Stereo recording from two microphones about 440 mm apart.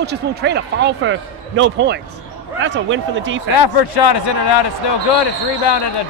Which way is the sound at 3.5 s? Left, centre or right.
Left.